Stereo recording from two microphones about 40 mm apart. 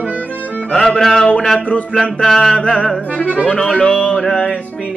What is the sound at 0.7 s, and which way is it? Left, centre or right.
Male singing, centre.